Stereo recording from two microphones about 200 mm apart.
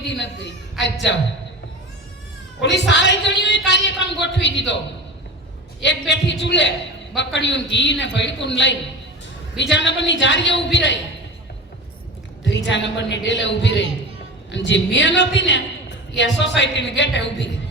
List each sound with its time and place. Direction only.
0.1 s a woman's voice: 60° left (ahead or behind)
2.6 s a woman's voice: 60° left (ahead or behind)
5.8 s a woman's voice: 65° left (ahead or behind)
9.7 s a woman's voice: 65° left (ahead or behind)
12.5 s a woman's voice: 65° left (ahead or behind)